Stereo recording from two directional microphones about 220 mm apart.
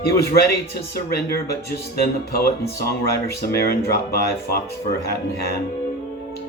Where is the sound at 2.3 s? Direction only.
45° left (ahead or behind).